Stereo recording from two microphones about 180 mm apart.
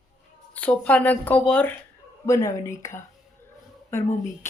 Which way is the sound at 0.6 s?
5° left (ahead or behind).